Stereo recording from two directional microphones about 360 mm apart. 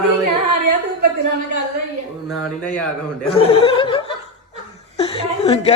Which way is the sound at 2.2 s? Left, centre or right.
Centre.